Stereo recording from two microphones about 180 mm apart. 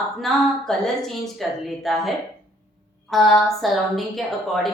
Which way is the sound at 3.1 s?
Centre (ahead or behind).